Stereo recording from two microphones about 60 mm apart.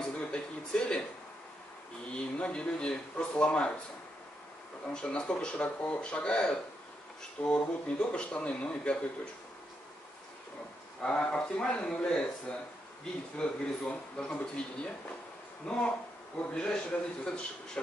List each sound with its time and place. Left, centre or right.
0.0 s a sound: centre
2.1 s speech: centre
4.8 s speech: centre
11.0 s speech: centre